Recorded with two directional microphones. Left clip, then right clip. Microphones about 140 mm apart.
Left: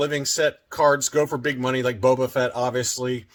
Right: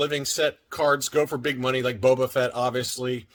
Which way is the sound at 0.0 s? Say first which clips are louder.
Left 2 dB; 25° right (ahead or behind).